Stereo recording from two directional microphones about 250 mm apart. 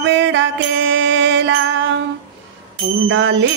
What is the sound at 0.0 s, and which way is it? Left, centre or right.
Music, right.